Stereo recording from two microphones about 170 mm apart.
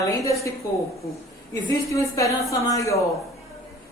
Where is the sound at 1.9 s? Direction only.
20° left (ahead or behind).